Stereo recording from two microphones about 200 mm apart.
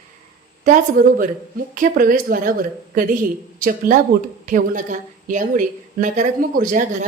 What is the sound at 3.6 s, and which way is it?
A woman's voice, 45° right (ahead or behind).